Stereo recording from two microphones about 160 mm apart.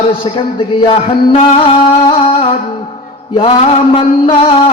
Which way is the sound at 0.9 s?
35° left (ahead or behind).